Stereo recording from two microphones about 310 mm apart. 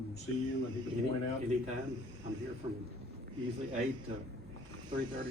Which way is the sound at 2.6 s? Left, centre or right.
Centre.